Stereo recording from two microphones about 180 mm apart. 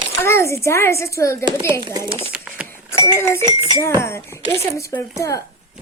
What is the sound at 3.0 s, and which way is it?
Speech, 15° left (ahead or behind).